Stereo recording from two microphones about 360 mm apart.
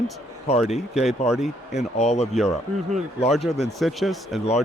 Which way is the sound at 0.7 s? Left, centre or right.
Centre.